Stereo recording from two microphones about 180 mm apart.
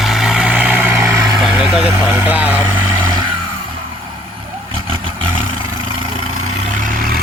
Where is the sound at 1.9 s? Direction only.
15° right (ahead or behind).